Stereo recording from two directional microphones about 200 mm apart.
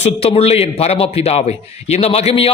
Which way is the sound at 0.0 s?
30° left (ahead or behind).